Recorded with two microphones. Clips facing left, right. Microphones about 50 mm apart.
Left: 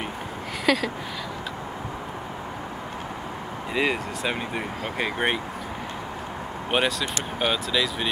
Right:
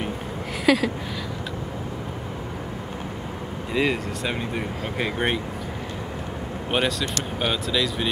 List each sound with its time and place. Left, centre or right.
0.7 s a sound: centre
3.7 s speech: centre
6.7 s speech: centre